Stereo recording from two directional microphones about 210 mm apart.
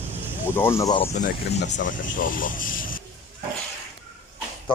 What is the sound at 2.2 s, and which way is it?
Speech, 40° left (ahead or behind).